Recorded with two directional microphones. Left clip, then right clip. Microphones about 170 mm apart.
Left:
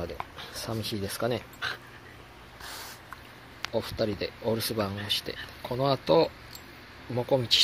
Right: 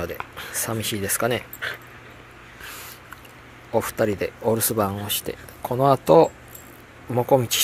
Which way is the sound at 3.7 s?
15° right (ahead or behind).